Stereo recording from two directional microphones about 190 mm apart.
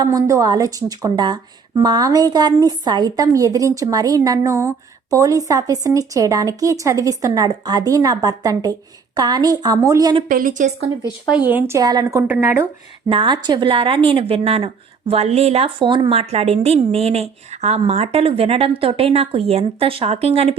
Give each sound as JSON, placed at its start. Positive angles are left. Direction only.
{"t": 0.0, "sound": "a woman's voice", "side_deg": -20}
{"t": 10.2, "sound": "a woman's voice", "side_deg": -45}
{"t": 11.3, "sound": "speech", "side_deg": -10}
{"t": 13.1, "sound": "a woman's voice", "side_deg": -25}